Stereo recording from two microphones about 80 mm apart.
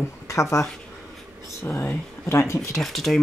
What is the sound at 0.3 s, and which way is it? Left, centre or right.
Speech, left.